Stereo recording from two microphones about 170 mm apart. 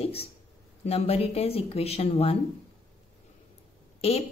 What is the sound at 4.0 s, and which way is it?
Speech, 35° left (ahead or behind).